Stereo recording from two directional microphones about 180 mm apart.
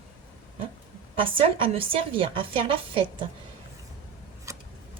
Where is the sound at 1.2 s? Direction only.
30° right (ahead or behind).